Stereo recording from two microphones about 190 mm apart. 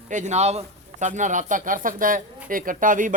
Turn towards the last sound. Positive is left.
turn(degrees=-45)  # may be behind; listen again after turning